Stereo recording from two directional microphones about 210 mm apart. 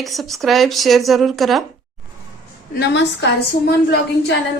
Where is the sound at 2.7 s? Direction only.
55° left (ahead or behind).